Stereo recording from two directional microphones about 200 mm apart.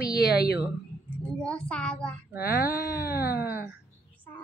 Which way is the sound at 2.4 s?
50° left (ahead or behind).